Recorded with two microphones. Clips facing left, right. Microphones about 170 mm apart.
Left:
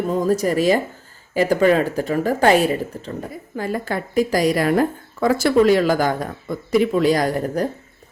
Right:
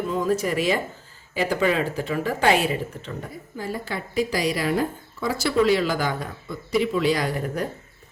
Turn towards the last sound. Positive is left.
turn(degrees=40)  # may be behind; listen again after turning